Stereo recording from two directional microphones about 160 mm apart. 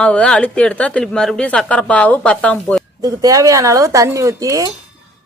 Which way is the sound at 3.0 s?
20° right (ahead or behind).